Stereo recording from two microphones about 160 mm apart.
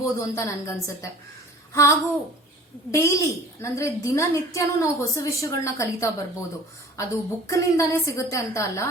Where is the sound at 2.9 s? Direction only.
15° left (ahead or behind).